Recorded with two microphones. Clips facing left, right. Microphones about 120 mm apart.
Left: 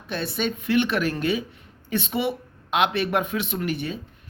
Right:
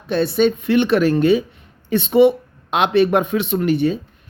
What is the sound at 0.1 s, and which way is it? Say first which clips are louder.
Speech: right 11 dB; 30° right (ahead or behind).